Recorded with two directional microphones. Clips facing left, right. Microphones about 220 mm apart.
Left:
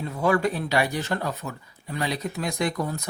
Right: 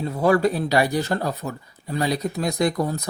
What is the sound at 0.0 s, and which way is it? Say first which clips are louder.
Speech: right 4 dB; 35° right (ahead or behind).